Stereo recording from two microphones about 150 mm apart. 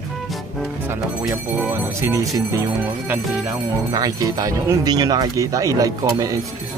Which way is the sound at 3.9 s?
25° right (ahead or behind).